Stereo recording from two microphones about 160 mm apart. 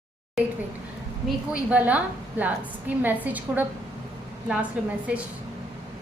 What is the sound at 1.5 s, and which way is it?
A woman's voice, 10° right (ahead or behind).